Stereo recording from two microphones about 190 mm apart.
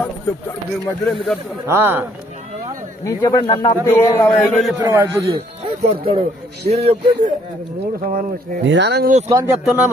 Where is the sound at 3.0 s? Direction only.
20° left (ahead or behind).